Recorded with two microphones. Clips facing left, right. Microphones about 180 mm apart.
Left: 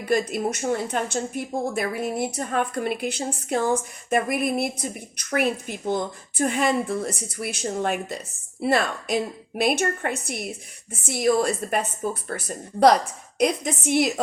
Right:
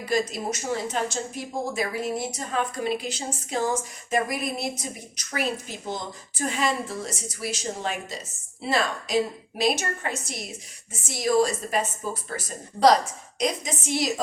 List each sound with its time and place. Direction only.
0.0 s speech: 60° left (ahead or behind)
13.4 s speech: 60° left (ahead or behind)